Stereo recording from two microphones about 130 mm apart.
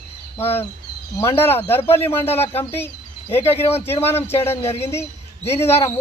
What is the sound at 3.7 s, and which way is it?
Speech, 50° left (ahead or behind).